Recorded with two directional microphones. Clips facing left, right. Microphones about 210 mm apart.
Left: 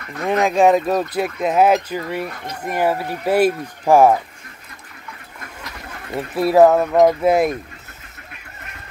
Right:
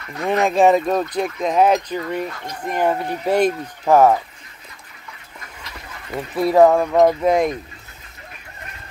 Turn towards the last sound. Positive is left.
turn(degrees=5)  # may be behind; listen again after turning